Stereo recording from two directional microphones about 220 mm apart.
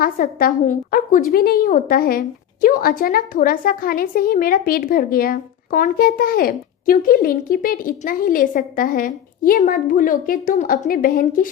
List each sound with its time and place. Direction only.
0.0 s a woman's voice: 40° left (ahead or behind)